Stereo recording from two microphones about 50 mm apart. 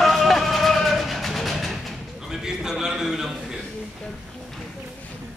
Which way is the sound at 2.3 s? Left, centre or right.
Centre.